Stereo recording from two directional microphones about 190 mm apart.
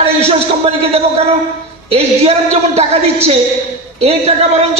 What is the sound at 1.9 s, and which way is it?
A man's voice, 35° right (ahead or behind).